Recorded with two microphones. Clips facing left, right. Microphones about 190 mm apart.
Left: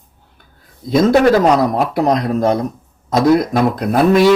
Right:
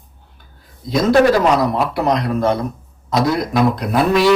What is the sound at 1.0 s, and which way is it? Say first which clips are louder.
Speech: left 1 dB; 45° left (ahead or behind).